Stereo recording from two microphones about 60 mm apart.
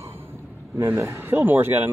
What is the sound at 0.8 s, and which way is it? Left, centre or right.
A man's voice, right.